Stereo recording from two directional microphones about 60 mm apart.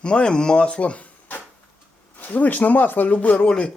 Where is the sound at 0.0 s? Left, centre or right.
Centre.